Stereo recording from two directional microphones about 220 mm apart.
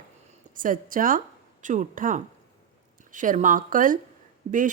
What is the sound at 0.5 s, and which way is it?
A woman's voice, 40° right (ahead or behind).